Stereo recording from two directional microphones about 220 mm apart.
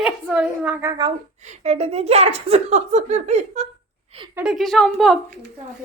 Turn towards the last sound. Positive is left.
turn(degrees=0)  # may be behind; listen again after turning